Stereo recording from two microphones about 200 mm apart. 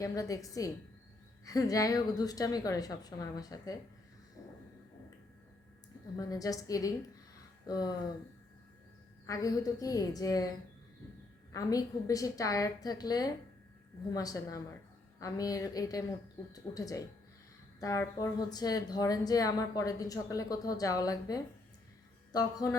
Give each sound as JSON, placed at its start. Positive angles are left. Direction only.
{"t": 0.0, "sound": "speech", "side_deg": 15}
{"t": 6.1, "sound": "speech", "side_deg": 15}
{"t": 9.2, "sound": "speech", "side_deg": 15}
{"t": 11.5, "sound": "a man's voice", "side_deg": 15}